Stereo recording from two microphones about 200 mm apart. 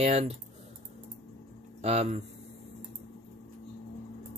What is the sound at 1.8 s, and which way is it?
Speech, 30° right (ahead or behind).